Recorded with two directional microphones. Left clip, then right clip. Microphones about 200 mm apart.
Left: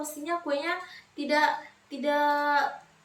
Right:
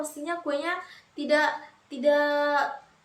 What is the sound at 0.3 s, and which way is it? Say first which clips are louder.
A woman's voice: even; 15° right (ahead or behind).